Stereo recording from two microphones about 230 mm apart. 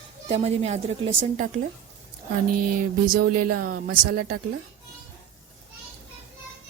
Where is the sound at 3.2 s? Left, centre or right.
Right.